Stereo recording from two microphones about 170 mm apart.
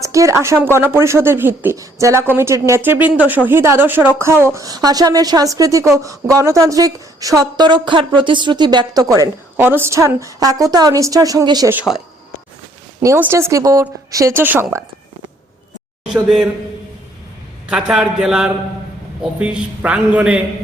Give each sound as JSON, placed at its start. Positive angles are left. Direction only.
{"t": 0.0, "sound": "a woman's voice", "side_deg": -20}
{"t": 11.7, "sound": "speech", "side_deg": -5}
{"t": 16.0, "sound": "speech", "side_deg": -5}
{"t": 17.7, "sound": "speech", "side_deg": -5}